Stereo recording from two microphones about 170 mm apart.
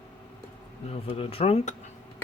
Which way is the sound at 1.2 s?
35° left (ahead or behind).